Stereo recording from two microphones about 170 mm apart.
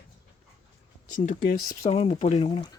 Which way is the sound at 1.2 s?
45° left (ahead or behind).